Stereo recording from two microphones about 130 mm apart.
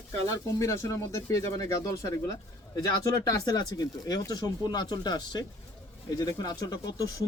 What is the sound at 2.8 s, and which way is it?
Speech, 30° left (ahead or behind).